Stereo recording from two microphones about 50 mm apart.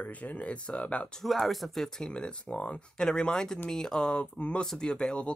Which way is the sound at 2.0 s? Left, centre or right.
Left.